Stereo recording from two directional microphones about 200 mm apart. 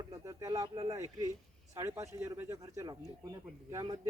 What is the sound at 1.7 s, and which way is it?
Speech, 15° right (ahead or behind).